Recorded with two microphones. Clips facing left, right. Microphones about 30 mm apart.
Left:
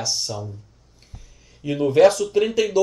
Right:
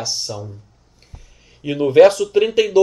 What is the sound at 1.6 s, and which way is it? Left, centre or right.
Speech, centre.